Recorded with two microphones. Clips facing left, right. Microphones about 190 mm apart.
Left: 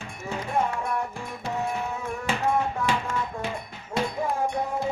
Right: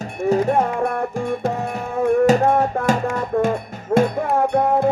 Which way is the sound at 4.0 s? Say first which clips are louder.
Right 9 dB; 60° right (ahead or behind).